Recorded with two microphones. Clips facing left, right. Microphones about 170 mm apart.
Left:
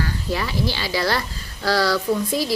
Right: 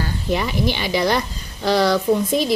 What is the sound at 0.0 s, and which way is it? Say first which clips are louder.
Speech: right 3 dB; 20° right (ahead or behind).